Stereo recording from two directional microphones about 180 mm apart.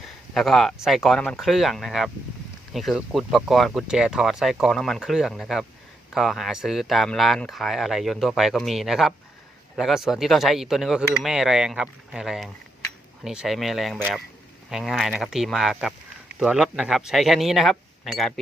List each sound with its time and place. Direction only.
0.3 s speech: centre (ahead or behind)